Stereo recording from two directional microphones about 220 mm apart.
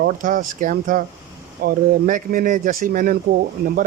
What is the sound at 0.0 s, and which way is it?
Speech, 40° right (ahead or behind).